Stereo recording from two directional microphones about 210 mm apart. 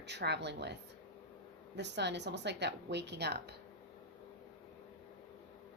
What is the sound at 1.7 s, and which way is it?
Speech, 55° right (ahead or behind).